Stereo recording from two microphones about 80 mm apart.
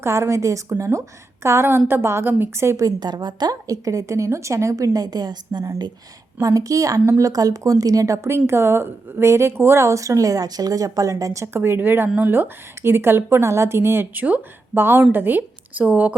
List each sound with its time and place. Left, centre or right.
0.0 s a woman's voice: right
2.8 s a woman's voice: right
6.4 s a woman's voice: right
11.5 s a woman's voice: right